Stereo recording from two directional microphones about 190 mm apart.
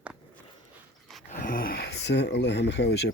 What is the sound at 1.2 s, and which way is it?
Speech, 45° left (ahead or behind).